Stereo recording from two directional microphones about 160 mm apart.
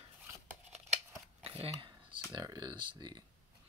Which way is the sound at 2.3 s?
25° right (ahead or behind).